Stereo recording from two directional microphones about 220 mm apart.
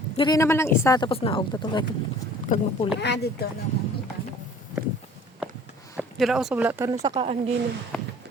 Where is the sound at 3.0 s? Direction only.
50° left (ahead or behind).